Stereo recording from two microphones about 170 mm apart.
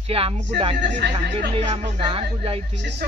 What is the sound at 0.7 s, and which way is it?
Speech, 90° right.